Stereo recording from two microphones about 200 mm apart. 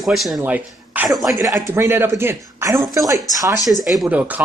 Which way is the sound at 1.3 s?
15° right (ahead or behind).